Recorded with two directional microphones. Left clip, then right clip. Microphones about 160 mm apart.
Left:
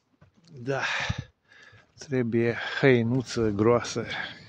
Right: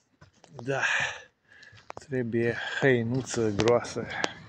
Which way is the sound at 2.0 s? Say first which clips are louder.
Left 3 dB; 45° left (ahead or behind).